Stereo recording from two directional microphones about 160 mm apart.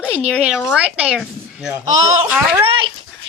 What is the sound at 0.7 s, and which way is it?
Speech, 5° right (ahead or behind).